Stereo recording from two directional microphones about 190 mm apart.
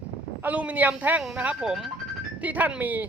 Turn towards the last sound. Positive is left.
turn(degrees=-10)  # may be behind; listen again after turning